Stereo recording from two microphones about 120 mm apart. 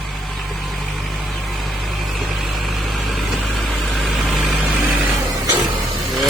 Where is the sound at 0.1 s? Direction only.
Centre (ahead or behind).